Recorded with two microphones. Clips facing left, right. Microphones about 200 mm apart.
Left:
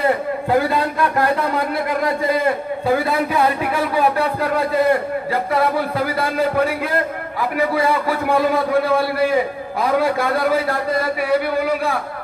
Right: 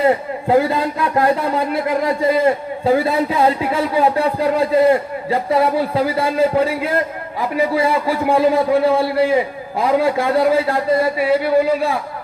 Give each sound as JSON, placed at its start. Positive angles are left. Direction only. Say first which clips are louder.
{"t": 0.0, "sound": "a man's voice", "louder": "right 2 dB", "side_deg": -25}